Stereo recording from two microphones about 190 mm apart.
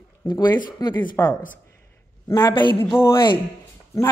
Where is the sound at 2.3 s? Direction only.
25° left (ahead or behind).